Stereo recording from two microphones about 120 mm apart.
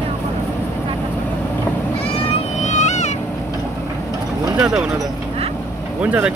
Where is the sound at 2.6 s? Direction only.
75° left (ahead or behind).